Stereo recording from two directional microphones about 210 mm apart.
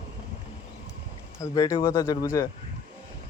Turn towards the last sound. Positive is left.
turn(degrees=15)  # may be behind; listen again after turning